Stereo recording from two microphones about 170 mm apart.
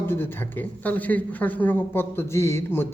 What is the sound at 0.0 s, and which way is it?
A man's voice, 15° left (ahead or behind).